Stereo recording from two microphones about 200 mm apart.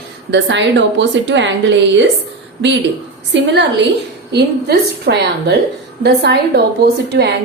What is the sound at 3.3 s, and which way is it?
A woman's voice, 60° right (ahead or behind).